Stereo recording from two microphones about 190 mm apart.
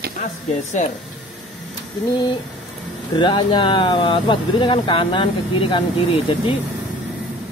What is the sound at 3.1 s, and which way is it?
Speech, 25° left (ahead or behind).